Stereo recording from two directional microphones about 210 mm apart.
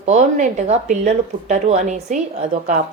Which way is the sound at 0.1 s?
35° right (ahead or behind).